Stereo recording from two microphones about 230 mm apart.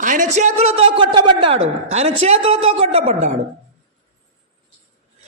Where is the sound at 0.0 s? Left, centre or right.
Right.